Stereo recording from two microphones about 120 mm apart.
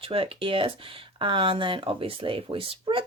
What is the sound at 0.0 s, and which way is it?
Speech, 50° right (ahead or behind).